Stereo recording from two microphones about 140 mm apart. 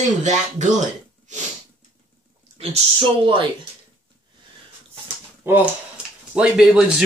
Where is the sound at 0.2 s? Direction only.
60° right (ahead or behind).